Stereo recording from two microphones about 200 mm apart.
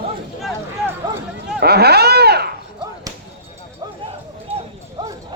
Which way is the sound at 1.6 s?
55° right (ahead or behind).